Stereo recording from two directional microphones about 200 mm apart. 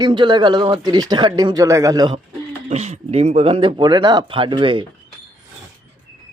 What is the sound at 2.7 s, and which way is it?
Speech, 35° right (ahead or behind).